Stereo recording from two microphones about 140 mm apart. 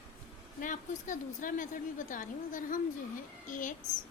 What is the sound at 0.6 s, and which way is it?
A woman's voice, 70° left (ahead or behind).